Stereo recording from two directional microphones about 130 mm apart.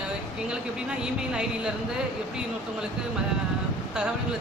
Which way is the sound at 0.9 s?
5° right (ahead or behind).